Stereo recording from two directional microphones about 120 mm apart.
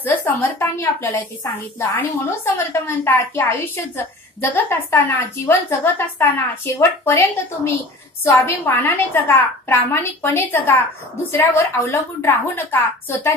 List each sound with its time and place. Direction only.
0.0 s a woman's voice: 15° left (ahead or behind)